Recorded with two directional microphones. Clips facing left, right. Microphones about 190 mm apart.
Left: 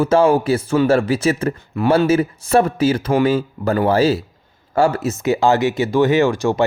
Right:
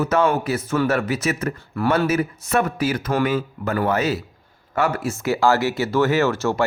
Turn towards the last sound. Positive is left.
turn(degrees=15)  # may be behind; listen again after turning